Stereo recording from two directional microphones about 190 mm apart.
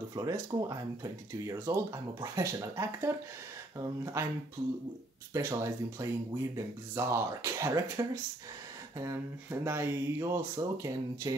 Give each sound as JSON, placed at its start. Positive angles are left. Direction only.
{"t": 0.1, "sound": "speech", "side_deg": -20}
{"t": 5.3, "sound": "speech", "side_deg": -15}